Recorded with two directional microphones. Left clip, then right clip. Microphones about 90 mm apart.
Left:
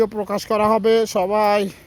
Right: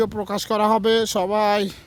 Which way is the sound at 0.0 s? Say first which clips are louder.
Left 3 dB; 30° right (ahead or behind).